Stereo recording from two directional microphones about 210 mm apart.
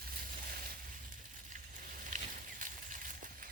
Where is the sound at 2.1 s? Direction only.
35° right (ahead or behind).